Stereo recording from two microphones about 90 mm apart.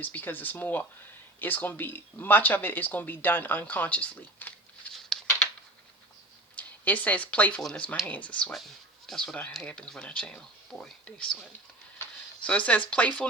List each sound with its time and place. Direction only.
0.0 s speech: 20° left (ahead or behind)
6.6 s speech: 20° left (ahead or behind)
12.5 s speech: 15° left (ahead or behind)